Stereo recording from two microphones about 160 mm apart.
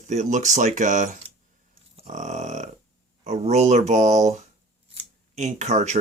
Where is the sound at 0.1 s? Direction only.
50° right (ahead or behind).